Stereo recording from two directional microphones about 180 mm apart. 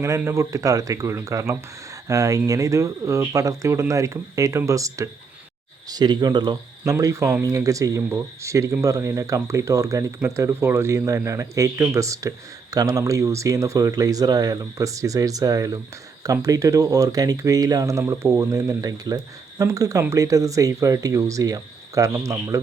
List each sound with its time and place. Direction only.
0.0 s a man's voice: 15° right (ahead or behind)